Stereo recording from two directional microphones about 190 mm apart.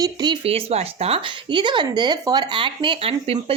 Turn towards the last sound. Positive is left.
turn(degrees=-30)  # may be behind; listen again after turning